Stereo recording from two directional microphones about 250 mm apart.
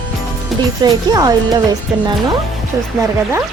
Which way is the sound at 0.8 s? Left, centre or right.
Centre.